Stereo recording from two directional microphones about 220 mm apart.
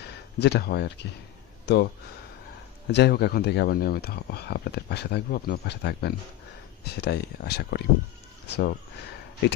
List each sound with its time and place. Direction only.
0.0 s speech: 50° left (ahead or behind)
2.9 s speech: 50° left (ahead or behind)